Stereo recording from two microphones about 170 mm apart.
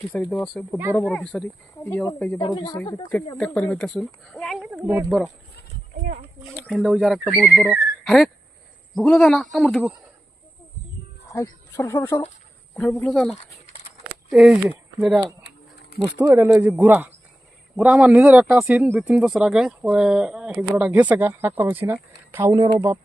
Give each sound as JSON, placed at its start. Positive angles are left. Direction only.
{"t": 0.1, "sound": "speech", "side_deg": 5}
{"t": 2.4, "sound": "speech", "side_deg": 25}
{"t": 3.3, "sound": "speech", "side_deg": 5}
{"t": 6.6, "sound": "speech", "side_deg": 0}
{"t": 7.5, "sound": "speech", "side_deg": -10}
{"t": 11.3, "sound": "speech", "side_deg": 15}
{"t": 15.4, "sound": "a sound", "side_deg": 90}
{"t": 16.1, "sound": "speech", "side_deg": -20}
{"t": 16.4, "sound": "speech", "side_deg": -10}
{"t": 18.4, "sound": "speech", "side_deg": 0}